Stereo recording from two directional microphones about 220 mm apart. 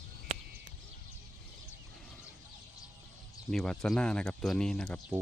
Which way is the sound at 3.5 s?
Centre (ahead or behind).